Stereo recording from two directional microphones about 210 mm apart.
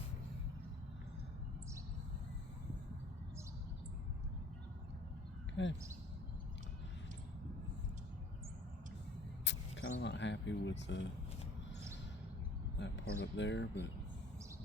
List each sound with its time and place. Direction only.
5.6 s a sound: 60° left (ahead or behind)
9.4 s speech: 60° left (ahead or behind)
12.8 s speech: 60° left (ahead or behind)